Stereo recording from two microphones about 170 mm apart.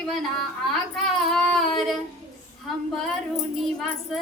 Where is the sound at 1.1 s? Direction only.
5° left (ahead or behind).